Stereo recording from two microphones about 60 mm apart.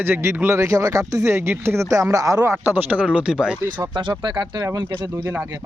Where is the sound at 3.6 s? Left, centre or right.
Right.